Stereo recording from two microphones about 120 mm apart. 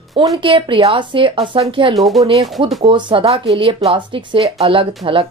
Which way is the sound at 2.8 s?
45° right (ahead or behind).